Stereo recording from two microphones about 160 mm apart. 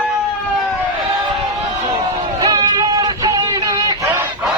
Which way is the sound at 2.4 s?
25° right (ahead or behind).